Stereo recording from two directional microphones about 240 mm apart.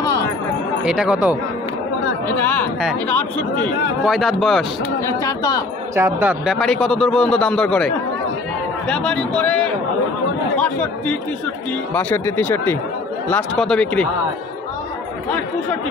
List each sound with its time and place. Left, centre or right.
0.8 s a man's voice: centre
2.3 s a man's voice: centre
5.0 s speech: centre
5.9 s a man's voice: centre
11.9 s a man's voice: centre